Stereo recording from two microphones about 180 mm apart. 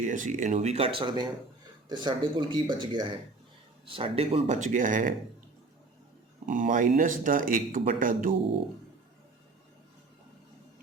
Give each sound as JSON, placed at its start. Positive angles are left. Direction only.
{"t": 0.0, "sound": "speech", "side_deg": -45}
{"t": 6.4, "sound": "speech", "side_deg": -45}